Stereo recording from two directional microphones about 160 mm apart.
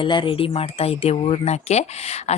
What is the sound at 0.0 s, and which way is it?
Speech, 30° left (ahead or behind).